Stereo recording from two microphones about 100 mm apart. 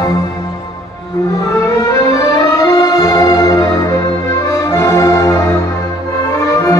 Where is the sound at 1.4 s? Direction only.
35° left (ahead or behind).